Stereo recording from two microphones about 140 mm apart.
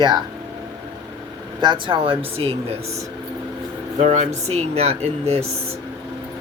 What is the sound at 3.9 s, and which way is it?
Speech, 55° right (ahead or behind).